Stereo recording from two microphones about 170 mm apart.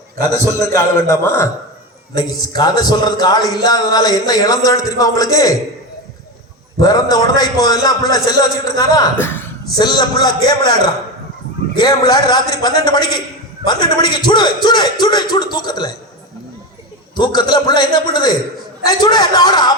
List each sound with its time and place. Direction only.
0.4 s a man's voice: 20° left (ahead or behind)
6.7 s a man's voice: 20° left (ahead or behind)
9.7 s a man's voice: 25° left (ahead or behind)
17.2 s a man's voice: 25° left (ahead or behind)